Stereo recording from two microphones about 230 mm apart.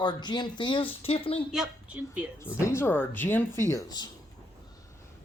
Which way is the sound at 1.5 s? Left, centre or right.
Centre.